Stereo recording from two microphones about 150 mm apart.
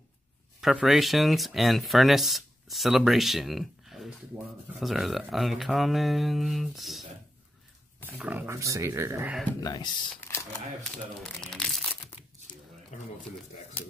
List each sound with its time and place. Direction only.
0.6 s speech: centre (ahead or behind)
8.1 s speech: 10° right (ahead or behind)
9.6 s speech: 25° left (ahead or behind)
10.9 s speech: 5° left (ahead or behind)
12.9 s a sound: 60° left (ahead or behind)